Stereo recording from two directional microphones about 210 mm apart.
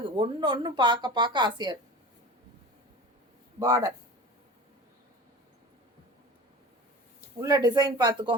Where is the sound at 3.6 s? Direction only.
15° right (ahead or behind).